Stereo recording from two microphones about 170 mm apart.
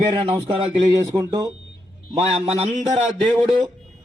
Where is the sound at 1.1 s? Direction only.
20° right (ahead or behind).